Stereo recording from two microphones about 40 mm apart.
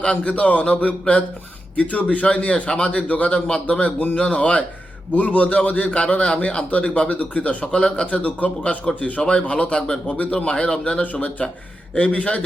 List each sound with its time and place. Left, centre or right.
0.0 s a man's voice: left
5.1 s a man's voice: left
7.7 s speech: left
8.0 s a man's voice: left
11.0 s a man's voice: left